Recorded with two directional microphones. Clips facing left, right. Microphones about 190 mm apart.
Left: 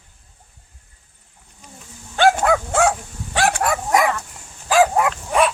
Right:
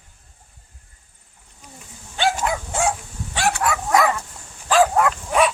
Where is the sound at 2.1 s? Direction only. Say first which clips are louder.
Left 6 dB; 55° left (ahead or behind).